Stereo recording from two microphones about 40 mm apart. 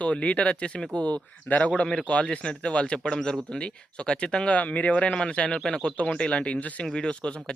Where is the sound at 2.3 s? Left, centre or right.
Left.